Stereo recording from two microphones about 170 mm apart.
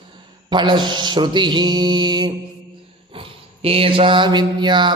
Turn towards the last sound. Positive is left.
turn(degrees=-25)  # may be behind; listen again after turning